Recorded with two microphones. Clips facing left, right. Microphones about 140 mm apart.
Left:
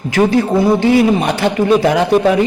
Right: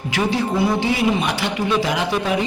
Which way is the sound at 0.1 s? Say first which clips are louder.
Left 8 dB; 50° left (ahead or behind).